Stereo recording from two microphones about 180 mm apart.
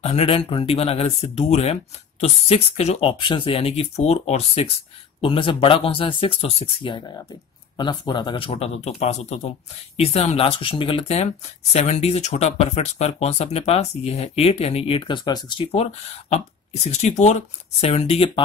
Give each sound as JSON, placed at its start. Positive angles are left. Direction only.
{"t": 0.0, "sound": "speech", "side_deg": 35}